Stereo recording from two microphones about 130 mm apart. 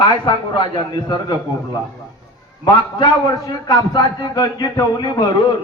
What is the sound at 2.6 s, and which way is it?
A man's voice, 35° left (ahead or behind).